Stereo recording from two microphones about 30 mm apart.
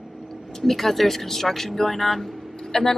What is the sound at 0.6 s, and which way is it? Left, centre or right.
Speech, centre.